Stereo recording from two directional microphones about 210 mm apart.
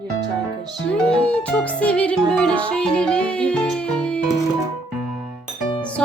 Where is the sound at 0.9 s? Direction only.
5° left (ahead or behind).